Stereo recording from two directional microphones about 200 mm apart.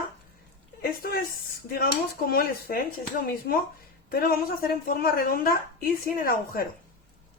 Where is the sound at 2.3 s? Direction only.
50° left (ahead or behind).